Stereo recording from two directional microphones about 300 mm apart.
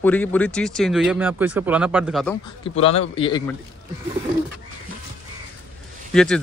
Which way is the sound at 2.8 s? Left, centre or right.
Centre.